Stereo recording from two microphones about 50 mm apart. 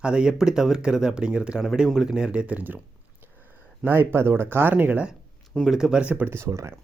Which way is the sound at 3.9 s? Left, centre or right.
Right.